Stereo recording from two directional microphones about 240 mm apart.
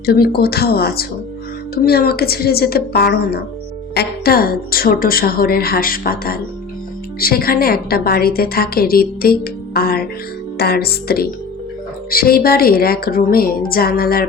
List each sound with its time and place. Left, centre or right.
0.0 s a woman's voice: left